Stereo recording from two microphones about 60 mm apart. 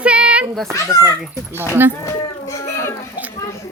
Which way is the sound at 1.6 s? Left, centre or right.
Right.